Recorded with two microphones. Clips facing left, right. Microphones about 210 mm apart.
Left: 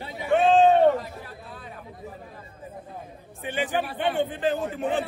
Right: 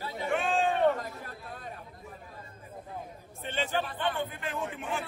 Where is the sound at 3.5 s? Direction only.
15° left (ahead or behind).